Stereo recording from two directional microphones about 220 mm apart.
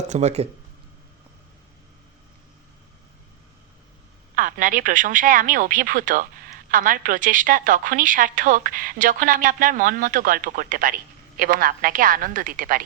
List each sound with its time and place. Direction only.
0.1 s a woman's voice: 30° right (ahead or behind)
4.4 s a woman's voice: 40° right (ahead or behind)